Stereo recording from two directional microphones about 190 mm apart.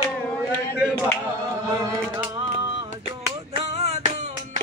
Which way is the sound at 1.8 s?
15° right (ahead or behind).